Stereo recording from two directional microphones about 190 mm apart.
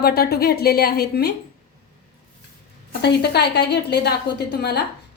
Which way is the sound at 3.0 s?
60° left (ahead or behind).